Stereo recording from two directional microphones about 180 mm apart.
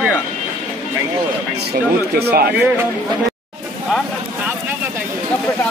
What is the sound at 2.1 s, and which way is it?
Speech, 60° right (ahead or behind).